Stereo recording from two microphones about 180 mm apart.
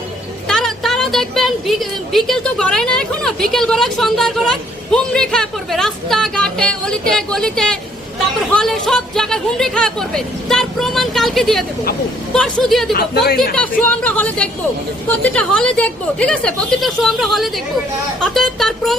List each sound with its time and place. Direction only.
0.4 s a woman's voice: centre (ahead or behind)
12.9 s speech: 60° left (ahead or behind)
13.6 s a woman's voice: 10° left (ahead or behind)